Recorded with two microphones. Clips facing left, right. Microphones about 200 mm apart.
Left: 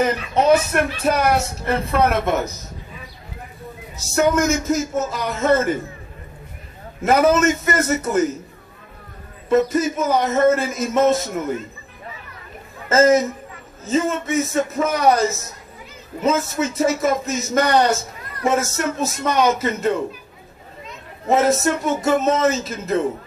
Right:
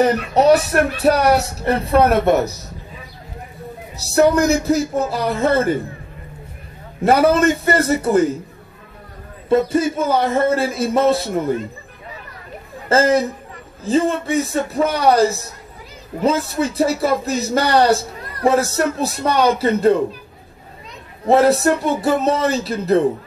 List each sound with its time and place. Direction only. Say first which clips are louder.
0.0 s speech: right 4 dB; 35° right (ahead or behind)
4.0 s speech: right 4 dB; 35° right (ahead or behind)
7.0 s speech: right 2 dB; 35° right (ahead or behind)
9.5 s speech: right 1 dB; 30° right (ahead or behind)
12.8 s speech: left 1 dB; 30° right (ahead or behind)
21.3 s speech: right 4 dB; 35° right (ahead or behind)